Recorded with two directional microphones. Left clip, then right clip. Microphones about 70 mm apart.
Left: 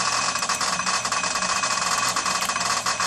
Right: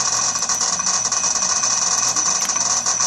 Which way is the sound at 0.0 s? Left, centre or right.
Right.